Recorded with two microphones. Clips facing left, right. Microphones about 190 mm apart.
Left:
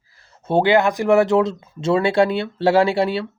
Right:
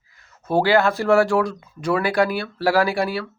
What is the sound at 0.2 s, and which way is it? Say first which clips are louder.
Speech: left 2 dB; 25° left (ahead or behind).